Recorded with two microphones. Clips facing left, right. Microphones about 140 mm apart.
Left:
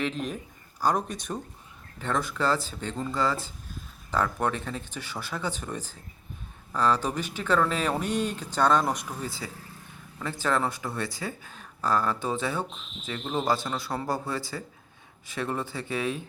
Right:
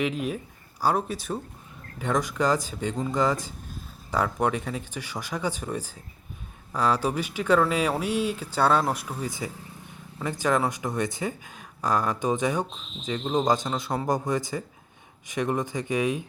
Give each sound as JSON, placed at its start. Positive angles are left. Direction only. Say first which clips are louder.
{"t": 0.0, "sound": "speech", "louder": "right 3 dB", "side_deg": -10}